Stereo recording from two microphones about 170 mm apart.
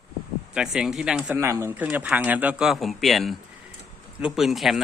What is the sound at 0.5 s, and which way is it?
Speech, 5° right (ahead or behind).